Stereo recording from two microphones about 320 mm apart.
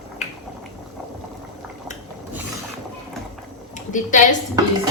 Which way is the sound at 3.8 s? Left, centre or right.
Left.